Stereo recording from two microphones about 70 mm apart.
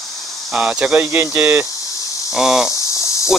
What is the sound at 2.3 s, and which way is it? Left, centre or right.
Cricket, centre.